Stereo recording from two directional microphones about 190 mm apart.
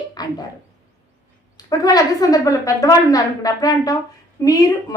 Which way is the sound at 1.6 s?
20° left (ahead or behind).